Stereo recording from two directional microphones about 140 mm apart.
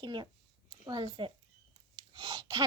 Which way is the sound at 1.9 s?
35° right (ahead or behind).